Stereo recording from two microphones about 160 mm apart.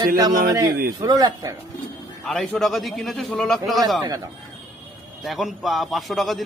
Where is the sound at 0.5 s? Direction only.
25° right (ahead or behind).